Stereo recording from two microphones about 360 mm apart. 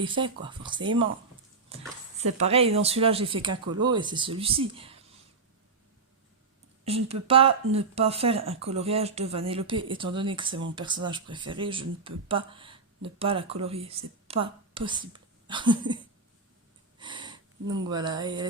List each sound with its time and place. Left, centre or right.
0.0 s speech: centre
1.7 s a sound: centre
2.2 s speech: centre
6.8 s speech: centre
17.0 s speech: centre